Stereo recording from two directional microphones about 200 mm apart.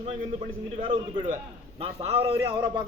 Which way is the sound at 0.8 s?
25° right (ahead or behind).